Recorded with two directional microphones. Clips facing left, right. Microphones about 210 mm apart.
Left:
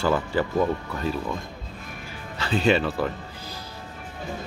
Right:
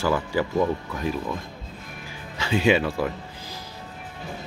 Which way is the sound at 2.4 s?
15° right (ahead or behind).